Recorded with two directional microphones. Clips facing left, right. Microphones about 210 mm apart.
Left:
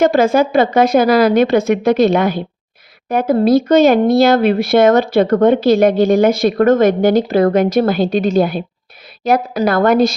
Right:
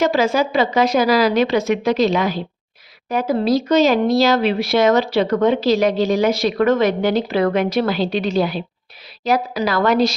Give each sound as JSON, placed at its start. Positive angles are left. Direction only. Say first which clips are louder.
{"t": 0.0, "sound": "speech", "louder": "left 5 dB", "side_deg": 50}